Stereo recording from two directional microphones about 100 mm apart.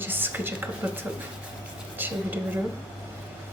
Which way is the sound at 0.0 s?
20° right (ahead or behind).